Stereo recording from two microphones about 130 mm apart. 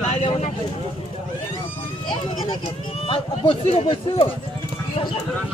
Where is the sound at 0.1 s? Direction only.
50° left (ahead or behind).